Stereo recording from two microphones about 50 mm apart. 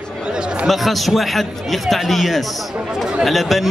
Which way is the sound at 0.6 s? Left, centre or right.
Centre.